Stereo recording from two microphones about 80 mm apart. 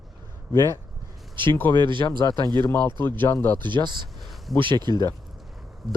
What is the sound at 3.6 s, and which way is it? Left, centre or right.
Speech, right.